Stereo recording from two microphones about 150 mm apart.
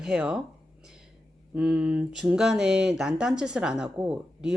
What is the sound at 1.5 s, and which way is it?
Speech, 5° right (ahead or behind).